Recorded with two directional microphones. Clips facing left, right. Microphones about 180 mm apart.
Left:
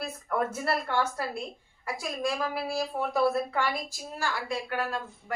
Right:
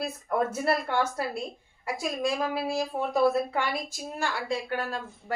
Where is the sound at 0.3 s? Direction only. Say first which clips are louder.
Right 3 dB; 20° right (ahead or behind).